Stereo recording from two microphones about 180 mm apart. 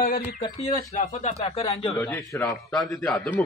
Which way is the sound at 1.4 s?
35° left (ahead or behind).